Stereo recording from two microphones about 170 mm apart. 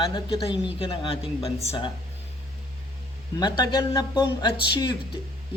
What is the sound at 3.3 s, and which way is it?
Speech, 25° left (ahead or behind).